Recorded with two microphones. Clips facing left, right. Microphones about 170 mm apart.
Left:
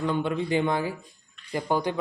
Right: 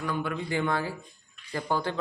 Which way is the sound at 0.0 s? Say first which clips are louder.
Left 5 dB; 25° left (ahead or behind).